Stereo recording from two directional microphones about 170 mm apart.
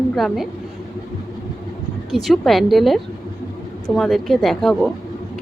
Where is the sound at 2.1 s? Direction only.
Centre (ahead or behind).